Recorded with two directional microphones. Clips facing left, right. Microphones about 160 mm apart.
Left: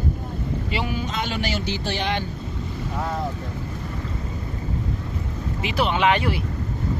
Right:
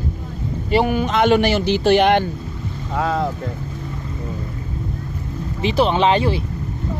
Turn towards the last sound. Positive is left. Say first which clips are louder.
# right 4 dB
turn(degrees=-30)  # may be behind; listen again after turning